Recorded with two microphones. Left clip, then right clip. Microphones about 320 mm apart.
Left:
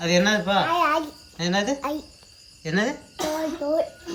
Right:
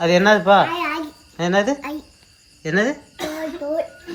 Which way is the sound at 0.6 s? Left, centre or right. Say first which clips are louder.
Left 2 dB; centre.